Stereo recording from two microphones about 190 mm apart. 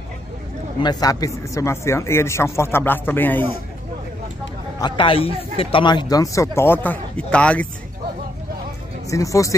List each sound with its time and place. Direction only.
0.7 s a man's voice: 20° left (ahead or behind)
4.7 s a man's voice: 25° left (ahead or behind); by 7.6 s 5° left (ahead or behind)
9.1 s a man's voice: 15° left (ahead or behind)